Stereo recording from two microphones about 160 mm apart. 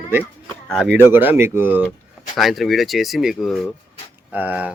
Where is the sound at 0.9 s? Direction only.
10° right (ahead or behind).